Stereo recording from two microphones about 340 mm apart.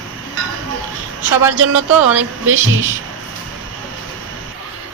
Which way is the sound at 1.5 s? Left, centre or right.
Right.